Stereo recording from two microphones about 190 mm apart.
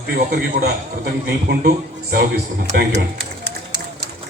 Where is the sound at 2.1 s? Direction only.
50° right (ahead or behind).